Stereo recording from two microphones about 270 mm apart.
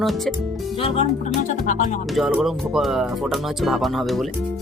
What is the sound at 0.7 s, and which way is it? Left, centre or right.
Speech, left.